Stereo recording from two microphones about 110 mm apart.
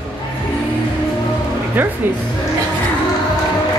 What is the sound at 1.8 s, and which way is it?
Speech, 20° right (ahead or behind).